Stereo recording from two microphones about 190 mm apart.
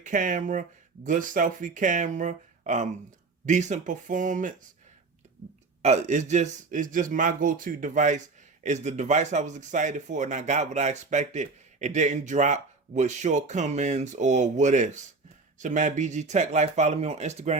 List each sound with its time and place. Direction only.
0.0 s speech: 45° right (ahead or behind)
5.8 s a man's voice: 35° right (ahead or behind)